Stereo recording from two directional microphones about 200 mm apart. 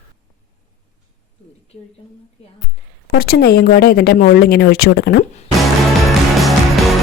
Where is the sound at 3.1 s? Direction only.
50° left (ahead or behind).